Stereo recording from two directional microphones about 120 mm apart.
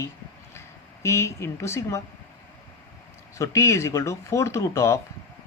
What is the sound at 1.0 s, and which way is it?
Speech, 25° left (ahead or behind).